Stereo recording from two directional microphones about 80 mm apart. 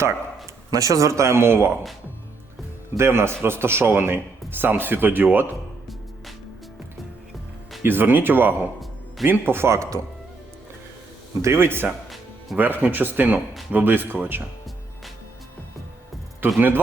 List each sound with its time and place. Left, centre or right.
0.7 s speech: right
3.0 s a man's voice: right
7.8 s a man's voice: right
11.4 s a man's voice: right
16.6 s a man's voice: right